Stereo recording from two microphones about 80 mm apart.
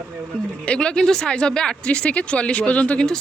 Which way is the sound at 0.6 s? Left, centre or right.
Centre.